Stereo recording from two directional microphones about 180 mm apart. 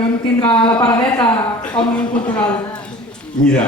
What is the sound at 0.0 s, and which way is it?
A woman's voice, 30° left (ahead or behind).